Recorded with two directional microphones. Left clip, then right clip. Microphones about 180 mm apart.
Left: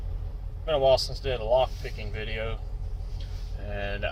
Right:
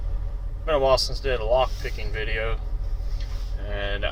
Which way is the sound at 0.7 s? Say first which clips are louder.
Right 2 dB; centre (ahead or behind).